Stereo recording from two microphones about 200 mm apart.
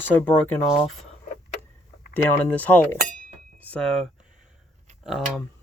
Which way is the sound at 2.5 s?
10° left (ahead or behind).